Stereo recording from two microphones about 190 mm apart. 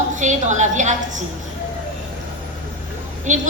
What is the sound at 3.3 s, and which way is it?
Speech, 40° right (ahead or behind).